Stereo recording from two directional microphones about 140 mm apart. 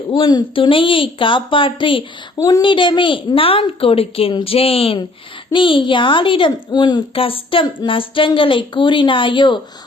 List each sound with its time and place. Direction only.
0.1 s a woman's voice: 35° left (ahead or behind)